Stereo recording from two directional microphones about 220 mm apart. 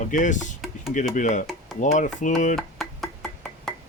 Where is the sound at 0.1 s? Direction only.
35° left (ahead or behind).